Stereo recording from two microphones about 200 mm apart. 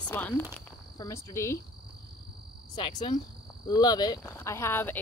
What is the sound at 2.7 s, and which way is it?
Speech, 25° left (ahead or behind).